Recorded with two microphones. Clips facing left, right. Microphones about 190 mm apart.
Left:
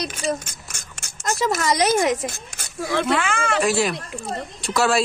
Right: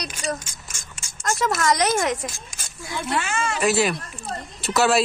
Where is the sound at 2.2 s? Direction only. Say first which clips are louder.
Left 4 dB; 65° left (ahead or behind); by 3.3 s 90° left.